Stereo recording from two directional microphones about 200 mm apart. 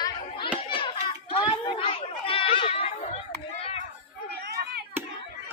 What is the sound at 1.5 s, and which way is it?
Chatter, 25° left (ahead or behind).